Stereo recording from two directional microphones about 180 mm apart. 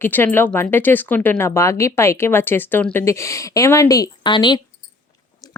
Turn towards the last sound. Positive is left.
turn(degrees=25)  # may be behind; listen again after turning